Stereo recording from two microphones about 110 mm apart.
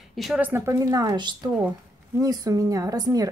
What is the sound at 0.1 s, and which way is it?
Speech, centre (ahead or behind).